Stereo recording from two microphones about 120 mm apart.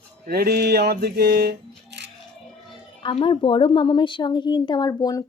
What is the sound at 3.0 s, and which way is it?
A woman's voice, 45° left (ahead or behind).